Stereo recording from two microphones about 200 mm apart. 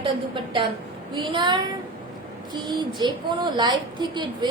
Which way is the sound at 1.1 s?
25° right (ahead or behind).